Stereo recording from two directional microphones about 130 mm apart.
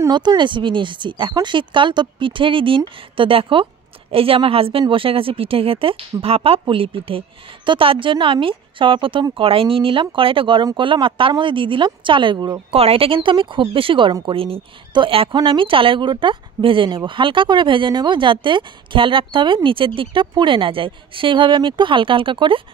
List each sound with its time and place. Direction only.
0.1 s a woman's voice: 35° right (ahead or behind)
12.7 s a woman's voice: 50° right (ahead or behind)